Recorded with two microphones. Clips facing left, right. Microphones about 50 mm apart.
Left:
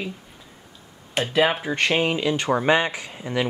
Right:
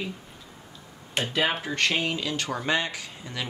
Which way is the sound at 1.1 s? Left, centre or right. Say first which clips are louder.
Left 5 dB; centre.